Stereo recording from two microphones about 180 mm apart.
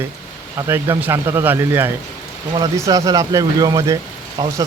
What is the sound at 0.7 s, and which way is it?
Speech, 15° right (ahead or behind).